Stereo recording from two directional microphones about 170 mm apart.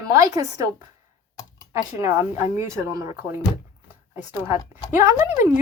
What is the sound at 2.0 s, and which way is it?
Speech, 15° right (ahead or behind).